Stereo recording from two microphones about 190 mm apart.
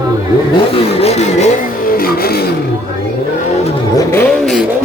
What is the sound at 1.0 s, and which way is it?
Vehicle, 35° left (ahead or behind).